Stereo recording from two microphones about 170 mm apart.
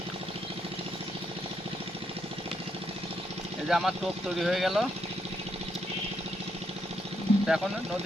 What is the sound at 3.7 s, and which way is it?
Speech, centre (ahead or behind).